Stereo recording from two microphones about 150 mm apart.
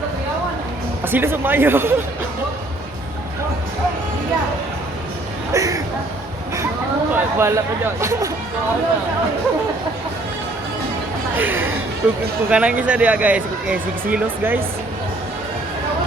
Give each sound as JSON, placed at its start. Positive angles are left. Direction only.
{"t": 1.0, "sound": "speech", "side_deg": -15}
{"t": 5.5, "sound": "speech", "side_deg": -20}
{"t": 7.1, "sound": "speech", "side_deg": -15}
{"t": 11.3, "sound": "speech", "side_deg": -10}